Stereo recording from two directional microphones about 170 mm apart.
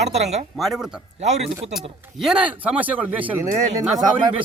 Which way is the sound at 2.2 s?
5° right (ahead or behind).